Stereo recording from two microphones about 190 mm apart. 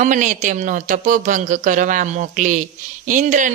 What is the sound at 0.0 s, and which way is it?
Speech, 40° right (ahead or behind).